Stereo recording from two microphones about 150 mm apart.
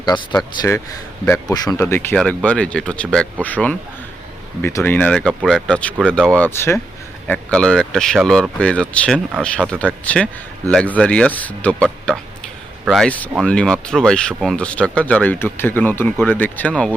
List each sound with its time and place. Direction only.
0.0 s speech: 30° left (ahead or behind)
1.8 s speech: 15° left (ahead or behind)